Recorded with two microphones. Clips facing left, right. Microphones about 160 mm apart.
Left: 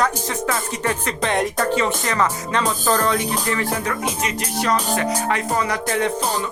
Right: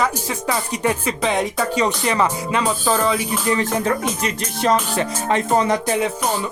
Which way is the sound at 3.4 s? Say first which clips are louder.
Right 4 dB; 20° right (ahead or behind).